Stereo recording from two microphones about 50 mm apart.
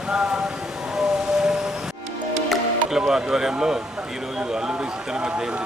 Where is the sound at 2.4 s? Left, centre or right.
Centre.